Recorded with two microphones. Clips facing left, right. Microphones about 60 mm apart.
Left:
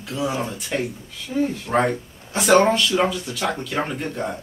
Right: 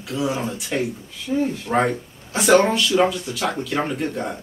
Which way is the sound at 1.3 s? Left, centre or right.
Centre.